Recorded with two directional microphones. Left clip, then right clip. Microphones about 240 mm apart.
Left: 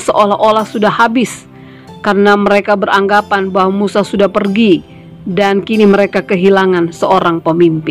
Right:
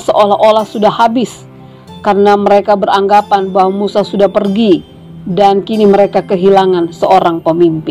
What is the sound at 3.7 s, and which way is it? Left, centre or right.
Speech, left.